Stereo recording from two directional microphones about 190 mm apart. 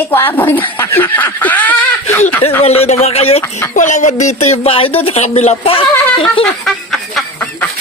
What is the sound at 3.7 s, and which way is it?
Speech, 40° left (ahead or behind).